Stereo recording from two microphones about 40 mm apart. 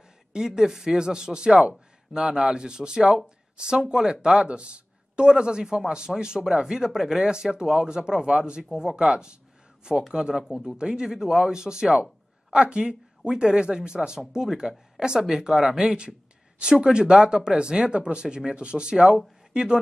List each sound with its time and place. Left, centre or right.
0.3 s speech: centre